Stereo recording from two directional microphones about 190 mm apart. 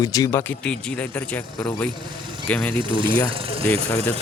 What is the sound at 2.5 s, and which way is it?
Speech, 5° left (ahead or behind).